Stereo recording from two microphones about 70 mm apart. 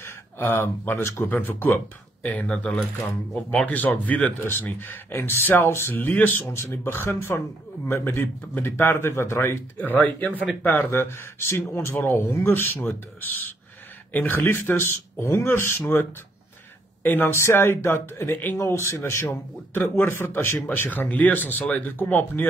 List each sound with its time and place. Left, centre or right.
0.0 s a sound: left
0.8 s speech: left
1.2 s a man's voice: left
2.2 s a man's voice: centre
5.1 s a man's voice: left
6.5 s speech: left
9.8 s a man's voice: left
17.3 s speech: left
18.6 s speech: left
19.7 s a man's voice: left